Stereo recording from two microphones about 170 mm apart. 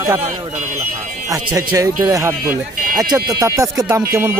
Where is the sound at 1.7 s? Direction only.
20° right (ahead or behind).